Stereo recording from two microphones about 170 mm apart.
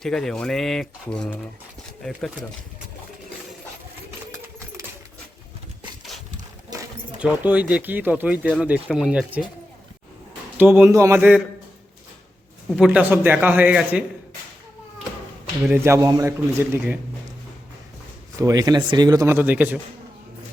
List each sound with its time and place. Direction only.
0.0 s speech: 5° left (ahead or behind)
7.2 s speech: 10° right (ahead or behind)
10.6 s speech: 10° right (ahead or behind)
12.7 s speech: 5° right (ahead or behind)
15.6 s speech: 15° right (ahead or behind)
18.3 s speech: 20° right (ahead or behind)